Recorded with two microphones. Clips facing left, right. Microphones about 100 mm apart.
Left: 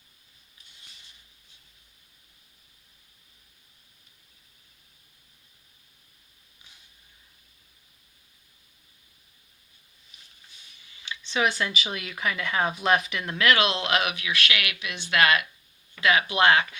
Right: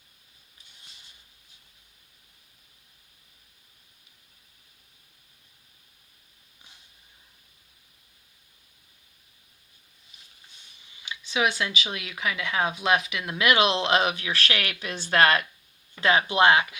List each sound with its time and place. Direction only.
10.8 s a sound: 20° right (ahead or behind)
11.2 s speech: 5° right (ahead or behind)
13.4 s speech: 20° right (ahead or behind)
16.2 s speech: 20° right (ahead or behind)